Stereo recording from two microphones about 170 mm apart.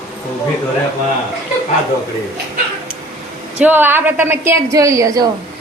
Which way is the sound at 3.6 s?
10° right (ahead or behind).